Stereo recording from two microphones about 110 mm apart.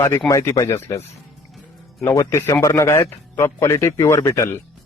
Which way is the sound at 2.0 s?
30° left (ahead or behind).